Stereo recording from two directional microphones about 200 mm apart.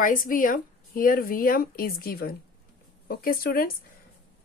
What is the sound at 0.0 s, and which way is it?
A woman's voice, 45° left (ahead or behind).